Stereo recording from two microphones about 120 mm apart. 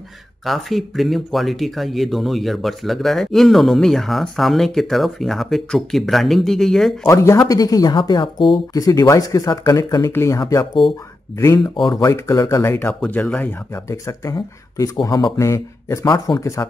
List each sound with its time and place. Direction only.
0.5 s speech: centre (ahead or behind)
7.1 s speech: 25° left (ahead or behind)
11.6 s speech: 35° left (ahead or behind)
13.0 s speech: 10° left (ahead or behind)
13.8 s speech: 25° left (ahead or behind)